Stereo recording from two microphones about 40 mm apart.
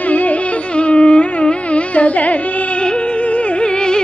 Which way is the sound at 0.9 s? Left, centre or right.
Left.